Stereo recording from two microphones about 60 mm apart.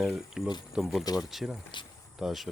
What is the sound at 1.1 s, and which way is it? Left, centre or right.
Speech, left.